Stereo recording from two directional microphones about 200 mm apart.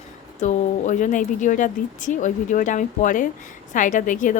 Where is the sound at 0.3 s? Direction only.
35° left (ahead or behind).